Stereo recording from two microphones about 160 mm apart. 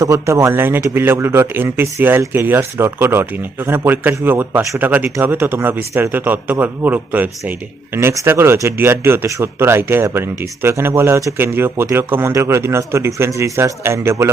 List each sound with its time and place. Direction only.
0.0 s a man's voice: 20° right (ahead or behind)